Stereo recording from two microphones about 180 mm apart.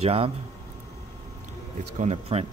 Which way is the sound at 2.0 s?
35° right (ahead or behind).